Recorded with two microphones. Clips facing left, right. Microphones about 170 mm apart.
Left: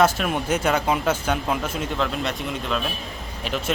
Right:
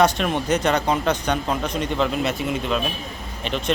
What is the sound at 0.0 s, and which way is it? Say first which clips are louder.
A man's voice: right 1 dB; 5° left (ahead or behind).